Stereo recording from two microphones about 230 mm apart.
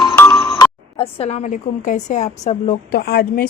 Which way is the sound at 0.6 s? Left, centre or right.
Left.